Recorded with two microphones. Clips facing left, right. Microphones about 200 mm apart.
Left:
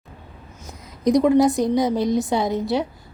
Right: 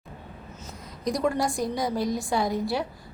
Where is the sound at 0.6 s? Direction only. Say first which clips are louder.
Left 8 dB; 20° left (ahead or behind).